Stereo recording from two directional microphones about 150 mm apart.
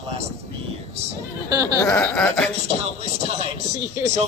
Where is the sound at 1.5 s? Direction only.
20° right (ahead or behind).